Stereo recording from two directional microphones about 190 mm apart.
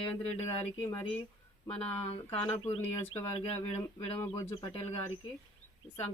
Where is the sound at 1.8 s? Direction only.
30° left (ahead or behind).